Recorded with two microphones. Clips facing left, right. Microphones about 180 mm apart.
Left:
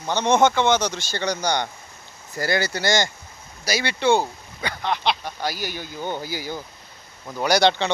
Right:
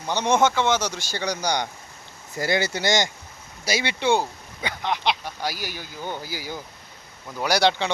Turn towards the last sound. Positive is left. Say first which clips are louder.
# left 2 dB
turn(degrees=-5)  # may be behind; listen again after turning